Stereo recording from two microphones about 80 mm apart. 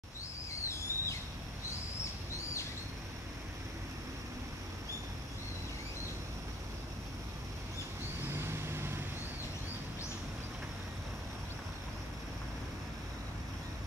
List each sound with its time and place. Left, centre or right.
0.7 s bird: left
8.3 s vehicle: right